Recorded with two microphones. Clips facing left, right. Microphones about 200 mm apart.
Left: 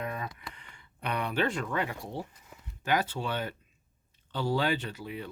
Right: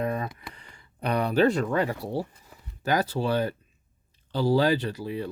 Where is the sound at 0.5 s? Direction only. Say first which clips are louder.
Right 3 dB; 35° right (ahead or behind).